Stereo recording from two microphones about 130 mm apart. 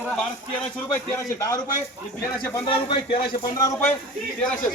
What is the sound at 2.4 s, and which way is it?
Speech, 40° left (ahead or behind).